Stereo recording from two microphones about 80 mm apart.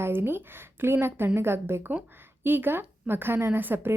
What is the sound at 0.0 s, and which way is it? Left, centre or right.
A woman's voice, right.